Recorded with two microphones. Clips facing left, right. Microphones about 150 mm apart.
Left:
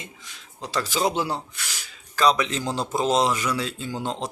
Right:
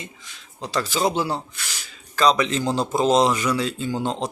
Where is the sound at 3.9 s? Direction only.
30° right (ahead or behind).